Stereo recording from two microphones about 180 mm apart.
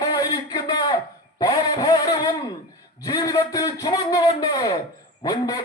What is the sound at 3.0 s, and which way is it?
A man's voice, 20° left (ahead or behind).